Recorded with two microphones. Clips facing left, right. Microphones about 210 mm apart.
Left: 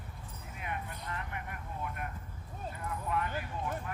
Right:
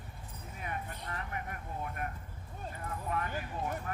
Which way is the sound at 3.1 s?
45° right (ahead or behind).